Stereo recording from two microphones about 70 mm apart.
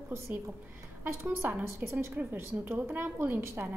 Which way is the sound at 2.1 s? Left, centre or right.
Right.